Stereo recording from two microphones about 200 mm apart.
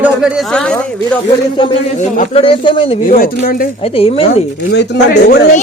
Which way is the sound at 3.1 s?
45° left (ahead or behind).